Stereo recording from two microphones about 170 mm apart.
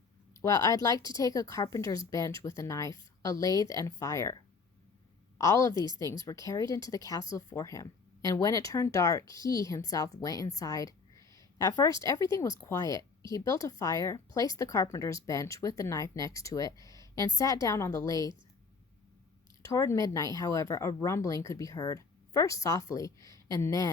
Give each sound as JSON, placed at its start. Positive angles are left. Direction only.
{"t": 0.4, "sound": "a woman's voice", "side_deg": 20}
{"t": 5.4, "sound": "a woman's voice", "side_deg": 20}
{"t": 19.6, "sound": "a woman's voice", "side_deg": 15}